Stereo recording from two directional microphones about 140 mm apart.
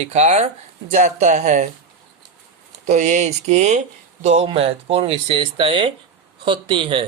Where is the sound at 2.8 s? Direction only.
60° right (ahead or behind); by 7.0 s 35° right (ahead or behind).